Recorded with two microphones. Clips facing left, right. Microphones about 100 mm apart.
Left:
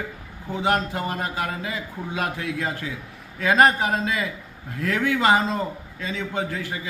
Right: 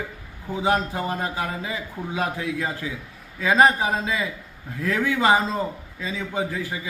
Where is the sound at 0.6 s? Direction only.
20° right (ahead or behind).